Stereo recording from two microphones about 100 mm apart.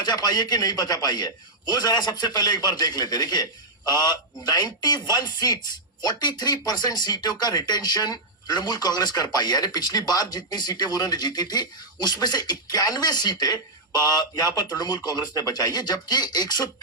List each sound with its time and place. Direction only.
0.0 s speech: 40° left (ahead or behind)